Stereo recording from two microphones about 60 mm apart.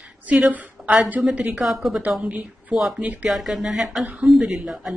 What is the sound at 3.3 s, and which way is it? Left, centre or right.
Speech, centre.